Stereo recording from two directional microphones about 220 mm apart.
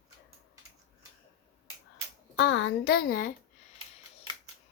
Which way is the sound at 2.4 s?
55° left (ahead or behind).